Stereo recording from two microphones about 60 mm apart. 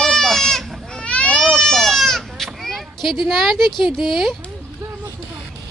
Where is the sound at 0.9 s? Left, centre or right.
Centre.